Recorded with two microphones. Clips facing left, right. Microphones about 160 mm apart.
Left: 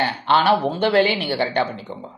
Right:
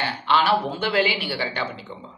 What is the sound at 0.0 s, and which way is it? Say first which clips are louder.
Speech: left 3 dB; 40° left (ahead or behind).